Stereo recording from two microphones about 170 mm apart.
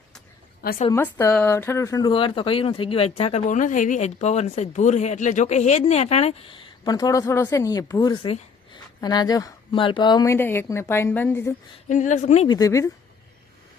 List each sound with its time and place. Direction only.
0.6 s a woman's voice: 60° left (ahead or behind)
1.1 s speech: 15° left (ahead or behind)
10.3 s a woman's voice: 15° left (ahead or behind)
11.9 s speech: 45° left (ahead or behind)
12.5 s speech: 20° left (ahead or behind)